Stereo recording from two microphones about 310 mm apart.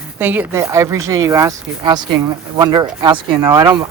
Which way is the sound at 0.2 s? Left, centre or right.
Centre.